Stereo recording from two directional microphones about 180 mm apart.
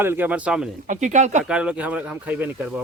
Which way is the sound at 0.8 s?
40° right (ahead or behind).